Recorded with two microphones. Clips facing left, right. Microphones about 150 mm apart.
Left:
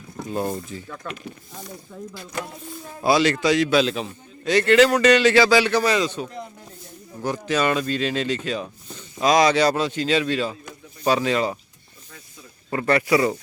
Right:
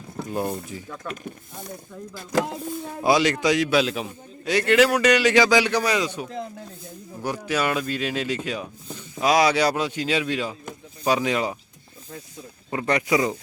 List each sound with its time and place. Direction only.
0.7 s speech: 10° right (ahead or behind)
2.3 s a sound: 90° right
3.0 s speech: 15° right (ahead or behind)
12.7 s speech: 15° right (ahead or behind)